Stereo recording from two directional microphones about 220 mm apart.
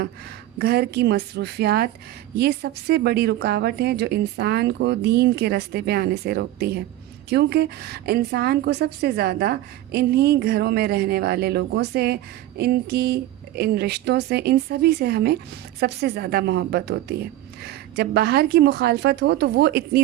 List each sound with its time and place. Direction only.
0.6 s a woman's voice: 45° right (ahead or behind)